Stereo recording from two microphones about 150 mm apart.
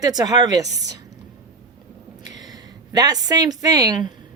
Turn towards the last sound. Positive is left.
turn(degrees=-25)  # may be behind; listen again after turning